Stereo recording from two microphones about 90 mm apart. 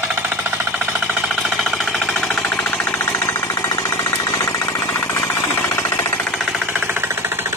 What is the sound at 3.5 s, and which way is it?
Jackhammer, 40° left (ahead or behind).